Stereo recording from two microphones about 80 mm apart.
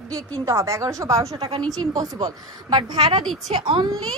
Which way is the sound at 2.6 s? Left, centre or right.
Right.